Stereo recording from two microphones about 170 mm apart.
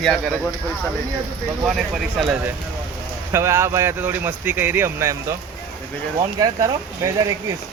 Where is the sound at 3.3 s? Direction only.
15° right (ahead or behind).